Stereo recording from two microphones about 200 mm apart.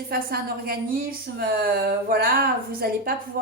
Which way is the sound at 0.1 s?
50° right (ahead or behind).